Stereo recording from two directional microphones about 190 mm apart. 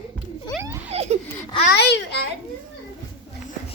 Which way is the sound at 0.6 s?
15° right (ahead or behind).